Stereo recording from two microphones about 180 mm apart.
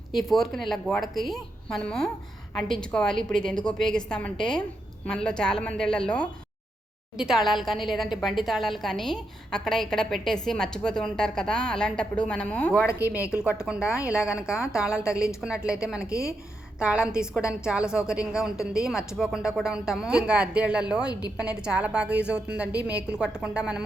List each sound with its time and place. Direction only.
0.1 s a woman's voice: centre (ahead or behind)
13.7 s a woman's voice: 5° right (ahead or behind)